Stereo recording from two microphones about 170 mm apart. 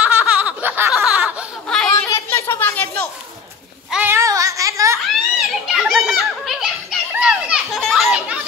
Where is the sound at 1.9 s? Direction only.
15° left (ahead or behind).